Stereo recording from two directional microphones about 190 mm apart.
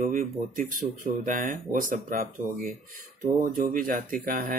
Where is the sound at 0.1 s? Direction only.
45° right (ahead or behind).